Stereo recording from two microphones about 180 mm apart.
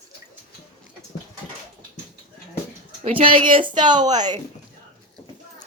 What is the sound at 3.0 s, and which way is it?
A woman's voice, 30° right (ahead or behind).